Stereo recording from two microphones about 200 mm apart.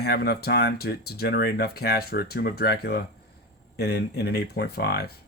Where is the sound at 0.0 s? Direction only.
50° left (ahead or behind).